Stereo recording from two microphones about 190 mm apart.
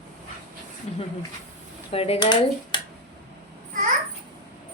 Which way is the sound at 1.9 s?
30° left (ahead or behind).